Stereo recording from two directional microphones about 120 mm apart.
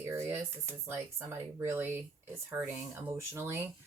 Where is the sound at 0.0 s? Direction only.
20° right (ahead or behind).